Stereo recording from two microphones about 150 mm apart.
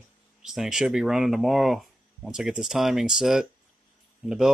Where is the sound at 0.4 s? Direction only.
5° right (ahead or behind).